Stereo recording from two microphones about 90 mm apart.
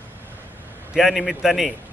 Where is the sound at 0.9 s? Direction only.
Centre (ahead or behind).